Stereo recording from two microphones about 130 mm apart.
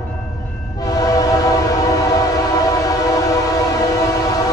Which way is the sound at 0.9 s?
25° left (ahead or behind).